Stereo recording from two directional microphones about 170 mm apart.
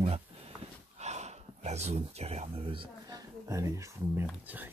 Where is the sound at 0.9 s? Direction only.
40° right (ahead or behind).